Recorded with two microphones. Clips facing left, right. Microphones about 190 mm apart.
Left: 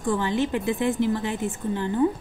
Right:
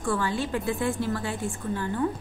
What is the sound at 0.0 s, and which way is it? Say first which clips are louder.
A woman's voice: left 4 dB; 20° left (ahead or behind).